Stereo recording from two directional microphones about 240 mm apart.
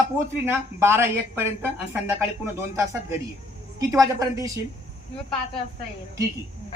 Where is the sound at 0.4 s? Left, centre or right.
Centre.